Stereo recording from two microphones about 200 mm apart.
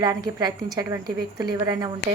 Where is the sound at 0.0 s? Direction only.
20° right (ahead or behind).